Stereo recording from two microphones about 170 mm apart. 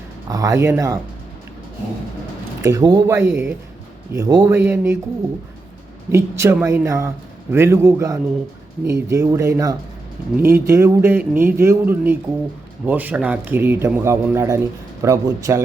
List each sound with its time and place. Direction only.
0.3 s speech: 20° right (ahead or behind)
2.6 s a man's voice: 20° right (ahead or behind)
6.1 s a man's voice: 15° right (ahead or behind)